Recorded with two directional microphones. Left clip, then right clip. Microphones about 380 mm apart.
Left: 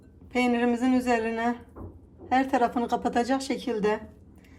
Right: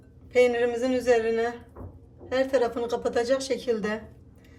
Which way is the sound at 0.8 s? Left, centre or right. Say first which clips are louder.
Right 3 dB; centre.